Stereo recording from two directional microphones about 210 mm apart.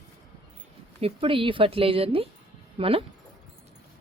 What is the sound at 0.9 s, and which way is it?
A woman's voice, 25° right (ahead or behind).